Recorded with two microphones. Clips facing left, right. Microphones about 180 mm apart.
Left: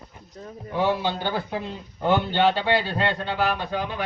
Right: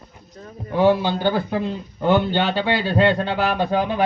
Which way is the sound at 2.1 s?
70° right (ahead or behind).